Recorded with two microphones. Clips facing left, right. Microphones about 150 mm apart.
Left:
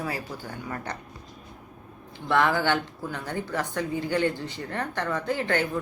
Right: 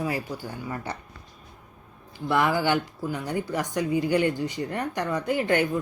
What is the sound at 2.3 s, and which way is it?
Speech, 10° right (ahead or behind).